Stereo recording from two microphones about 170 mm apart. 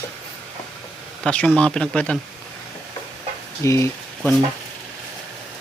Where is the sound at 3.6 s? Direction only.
15° left (ahead or behind).